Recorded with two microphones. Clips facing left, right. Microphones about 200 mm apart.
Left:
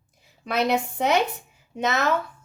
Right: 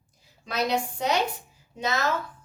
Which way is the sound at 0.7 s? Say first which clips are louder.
Left 4 dB; 60° left (ahead or behind).